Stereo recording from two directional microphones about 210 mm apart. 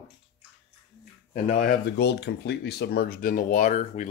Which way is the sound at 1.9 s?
55° left (ahead or behind).